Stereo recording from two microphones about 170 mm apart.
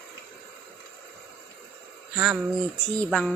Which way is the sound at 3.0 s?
5° left (ahead or behind).